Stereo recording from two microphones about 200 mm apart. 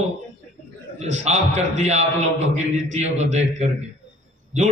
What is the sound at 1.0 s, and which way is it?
A man's voice, 35° right (ahead or behind).